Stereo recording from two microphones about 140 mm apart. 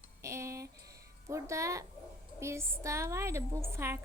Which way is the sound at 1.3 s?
20° right (ahead or behind).